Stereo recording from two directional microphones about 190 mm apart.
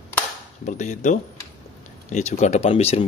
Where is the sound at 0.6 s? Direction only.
40° left (ahead or behind).